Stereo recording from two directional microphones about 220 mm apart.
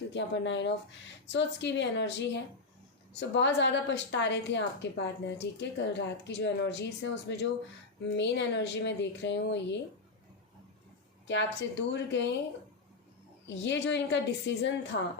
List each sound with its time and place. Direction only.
0.1 s a woman's voice: 55° left (ahead or behind)
11.3 s a woman's voice: 55° left (ahead or behind)
13.7 s a woman's voice: 55° left (ahead or behind)